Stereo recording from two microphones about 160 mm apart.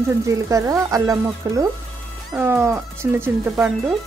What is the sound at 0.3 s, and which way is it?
Speech, 20° right (ahead or behind).